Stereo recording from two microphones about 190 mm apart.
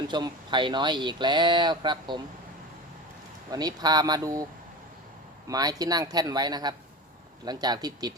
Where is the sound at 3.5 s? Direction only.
20° right (ahead or behind).